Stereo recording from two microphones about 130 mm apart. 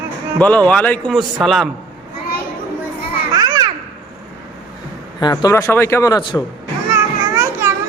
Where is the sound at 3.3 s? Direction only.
30° right (ahead or behind).